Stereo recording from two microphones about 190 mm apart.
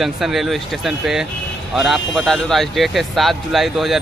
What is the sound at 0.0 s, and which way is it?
Speech, centre (ahead or behind).